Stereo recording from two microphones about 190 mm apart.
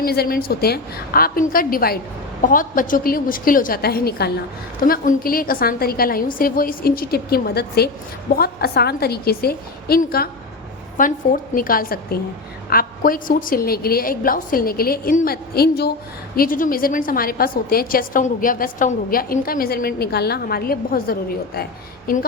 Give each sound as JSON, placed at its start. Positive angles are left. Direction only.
{"t": 0.0, "sound": "a woman's voice", "side_deg": 55}